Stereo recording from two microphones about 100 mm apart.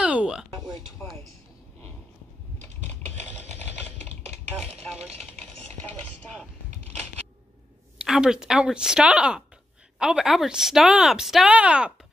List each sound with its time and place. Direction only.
0.0 s a sound: 10° right (ahead or behind)
1.0 s speech: 20° left (ahead or behind)
5.9 s chopping: 15° left (ahead or behind)
8.0 s a woman's voice: 5° right (ahead or behind)